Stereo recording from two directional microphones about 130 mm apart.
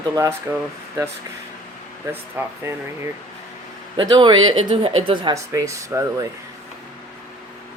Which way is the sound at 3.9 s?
35° right (ahead or behind).